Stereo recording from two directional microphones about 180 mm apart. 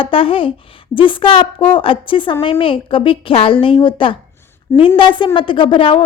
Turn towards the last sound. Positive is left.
turn(degrees=30)  # may be behind; listen again after turning